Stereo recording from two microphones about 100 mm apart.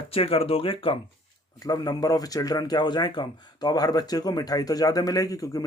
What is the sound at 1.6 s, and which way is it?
Speech, 40° left (ahead or behind).